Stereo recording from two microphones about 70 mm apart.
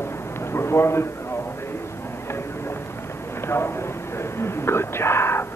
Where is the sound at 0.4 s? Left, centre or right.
Left.